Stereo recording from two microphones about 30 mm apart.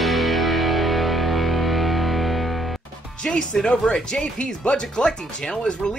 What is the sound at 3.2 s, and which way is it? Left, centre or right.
Speech, left.